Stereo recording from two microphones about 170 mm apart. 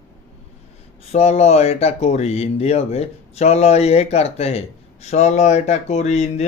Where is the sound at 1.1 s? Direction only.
40° left (ahead or behind).